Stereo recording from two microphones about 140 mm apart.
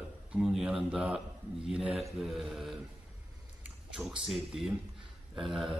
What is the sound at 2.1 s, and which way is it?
Mantra, centre (ahead or behind).